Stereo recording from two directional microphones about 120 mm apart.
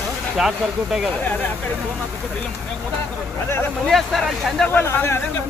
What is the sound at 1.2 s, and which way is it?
Speech, 15° left (ahead or behind).